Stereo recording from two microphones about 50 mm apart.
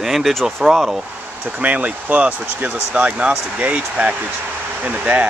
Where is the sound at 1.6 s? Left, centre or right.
Right.